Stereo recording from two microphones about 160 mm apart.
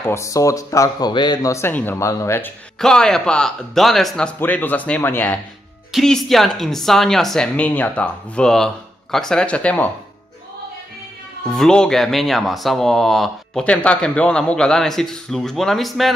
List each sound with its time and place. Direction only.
0.0 s speech: 15° left (ahead or behind)
2.8 s speech: 5° left (ahead or behind)
5.9 s speech: centre (ahead or behind)
11.4 s speech: 5° left (ahead or behind)